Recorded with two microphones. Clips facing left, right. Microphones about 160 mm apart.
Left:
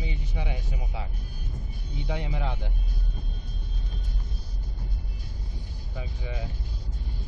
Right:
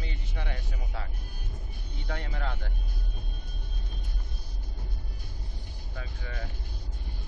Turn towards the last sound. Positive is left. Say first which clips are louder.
# left 4 dB
turn(degrees=15)  # may be behind; listen again after turning